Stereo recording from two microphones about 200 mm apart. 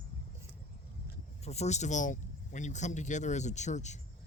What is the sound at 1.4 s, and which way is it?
Speech, 35° left (ahead or behind).